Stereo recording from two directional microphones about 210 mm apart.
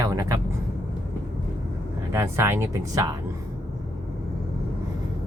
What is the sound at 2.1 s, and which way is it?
Speech, 10° right (ahead or behind).